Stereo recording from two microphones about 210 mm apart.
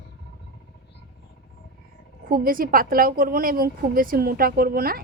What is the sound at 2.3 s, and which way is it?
A woman's voice, 40° right (ahead or behind).